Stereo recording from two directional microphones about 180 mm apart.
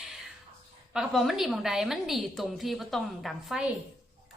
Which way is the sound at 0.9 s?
Centre (ahead or behind).